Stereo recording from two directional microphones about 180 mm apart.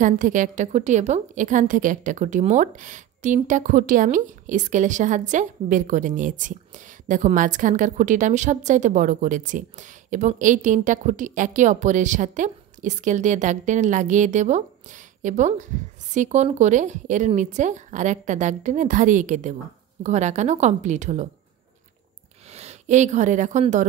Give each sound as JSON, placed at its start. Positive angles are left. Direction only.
{"t": 0.0, "sound": "a woman's voice", "side_deg": -45}
{"t": 22.5, "sound": "speech", "side_deg": -35}